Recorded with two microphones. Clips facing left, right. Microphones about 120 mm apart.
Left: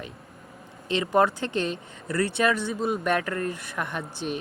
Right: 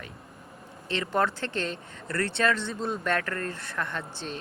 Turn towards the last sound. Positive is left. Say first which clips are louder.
# left 4 dB
turn(degrees=15)  # may be behind; listen again after turning